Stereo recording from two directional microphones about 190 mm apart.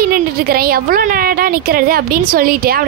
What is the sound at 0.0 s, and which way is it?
A woman's voice, 50° right (ahead or behind).